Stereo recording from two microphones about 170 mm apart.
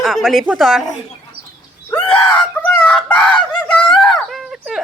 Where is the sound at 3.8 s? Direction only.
5° left (ahead or behind).